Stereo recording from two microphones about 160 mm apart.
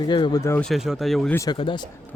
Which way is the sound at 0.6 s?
Centre (ahead or behind).